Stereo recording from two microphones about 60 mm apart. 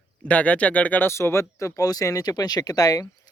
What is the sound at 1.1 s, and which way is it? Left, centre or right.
Speech, left.